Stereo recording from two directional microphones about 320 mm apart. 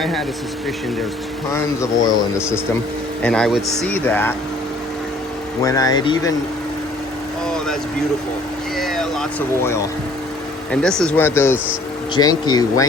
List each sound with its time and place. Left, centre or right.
0.0 s speech: centre
1.5 s speech: centre
3.2 s speech: centre
5.6 s speech: centre
8.8 s vehicle: centre
10.7 s speech: centre